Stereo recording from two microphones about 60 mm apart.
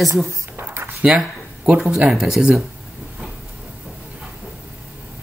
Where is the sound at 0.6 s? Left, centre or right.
Right.